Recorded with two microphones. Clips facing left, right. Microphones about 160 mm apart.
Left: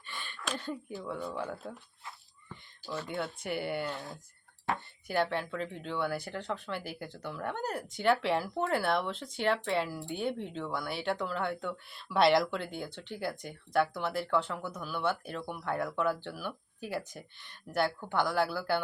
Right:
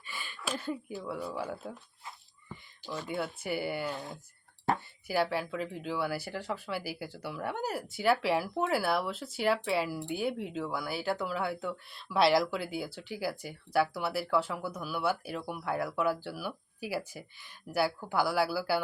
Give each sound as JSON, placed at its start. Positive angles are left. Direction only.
{"t": 0.0, "sound": "speech", "side_deg": -5}
{"t": 2.8, "sound": "speech", "side_deg": -10}
{"t": 4.7, "sound": "speech", "side_deg": -35}
{"t": 5.0, "sound": "speech", "side_deg": -5}